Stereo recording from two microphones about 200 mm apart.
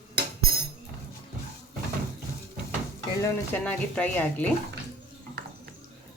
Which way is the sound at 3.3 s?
10° left (ahead or behind).